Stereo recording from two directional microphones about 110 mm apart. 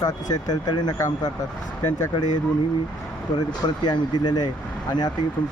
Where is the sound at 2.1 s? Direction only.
40° left (ahead or behind).